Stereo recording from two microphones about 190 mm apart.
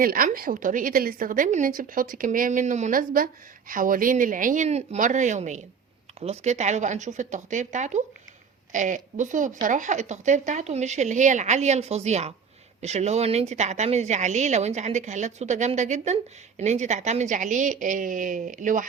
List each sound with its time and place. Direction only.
0.0 s a woman's voice: 50° right (ahead or behind)